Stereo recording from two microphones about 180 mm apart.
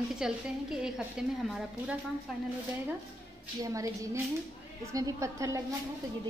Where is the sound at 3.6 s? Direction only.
20° right (ahead or behind).